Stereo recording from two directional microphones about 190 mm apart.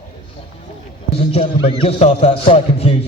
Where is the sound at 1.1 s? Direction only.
30° left (ahead or behind).